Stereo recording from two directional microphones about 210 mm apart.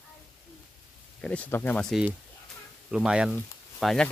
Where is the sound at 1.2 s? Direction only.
5° left (ahead or behind).